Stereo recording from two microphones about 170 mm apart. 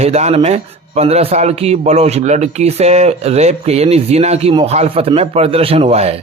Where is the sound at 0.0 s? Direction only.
40° right (ahead or behind).